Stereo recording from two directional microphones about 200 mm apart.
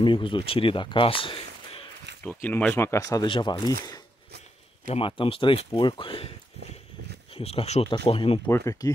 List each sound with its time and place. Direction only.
0.0 s speech: 25° left (ahead or behind)
2.2 s speech: 10° left (ahead or behind)
4.8 s speech: 30° left (ahead or behind)
7.3 s speech: 30° left (ahead or behind)
8.5 s speech: 15° left (ahead or behind)